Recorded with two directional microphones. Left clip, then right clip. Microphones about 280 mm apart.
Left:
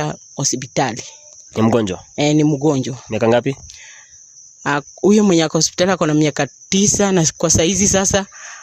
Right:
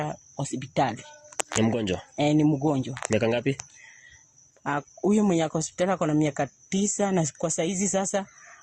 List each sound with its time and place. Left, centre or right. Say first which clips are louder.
0.0 s speech: left 10 dB; left
2.1 s speech: left 8 dB; left
3.1 s speech: left 9 dB; left
4.6 s speech: left 10 dB; left